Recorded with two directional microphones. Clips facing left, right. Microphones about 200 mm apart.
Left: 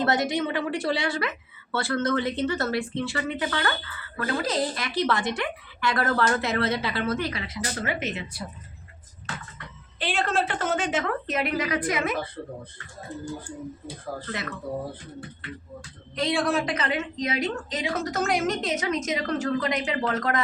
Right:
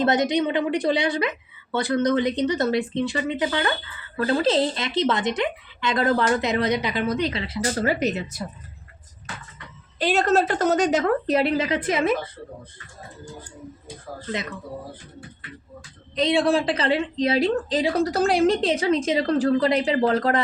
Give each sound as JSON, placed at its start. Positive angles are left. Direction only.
{"t": 0.0, "sound": "a woman's voice", "side_deg": -20}
{"t": 10.0, "sound": "a woman's voice", "side_deg": -40}
{"t": 16.1, "sound": "a woman's voice", "side_deg": -20}